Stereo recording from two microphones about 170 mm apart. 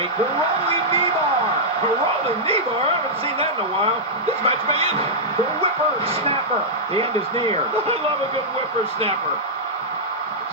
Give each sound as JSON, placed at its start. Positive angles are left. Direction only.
{"t": 4.4, "sound": "speech", "side_deg": -35}
{"t": 6.9, "sound": "speech", "side_deg": -30}